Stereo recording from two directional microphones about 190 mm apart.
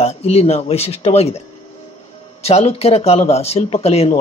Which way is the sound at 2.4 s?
35° left (ahead or behind).